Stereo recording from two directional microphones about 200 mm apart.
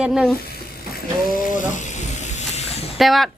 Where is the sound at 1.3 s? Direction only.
40° left (ahead or behind).